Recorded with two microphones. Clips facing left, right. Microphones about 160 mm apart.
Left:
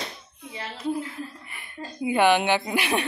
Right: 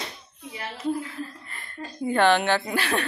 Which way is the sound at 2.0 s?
10° left (ahead or behind).